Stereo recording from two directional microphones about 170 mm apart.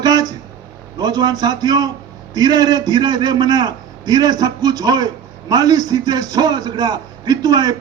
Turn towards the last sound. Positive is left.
turn(degrees=-25)  # may be behind; listen again after turning